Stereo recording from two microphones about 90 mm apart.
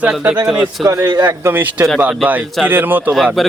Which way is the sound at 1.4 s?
25° right (ahead or behind).